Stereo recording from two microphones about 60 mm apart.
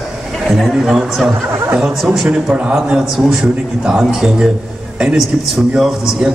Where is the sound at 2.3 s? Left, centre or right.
Centre.